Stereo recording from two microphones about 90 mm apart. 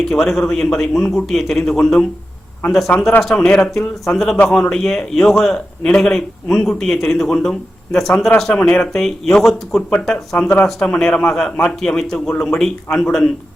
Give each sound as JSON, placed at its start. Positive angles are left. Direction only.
{"t": 0.0, "sound": "a man's voice", "side_deg": 5}
{"t": 3.2, "sound": "a man's voice", "side_deg": 5}